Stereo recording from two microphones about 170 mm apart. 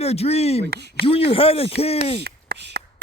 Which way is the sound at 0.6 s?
80° right.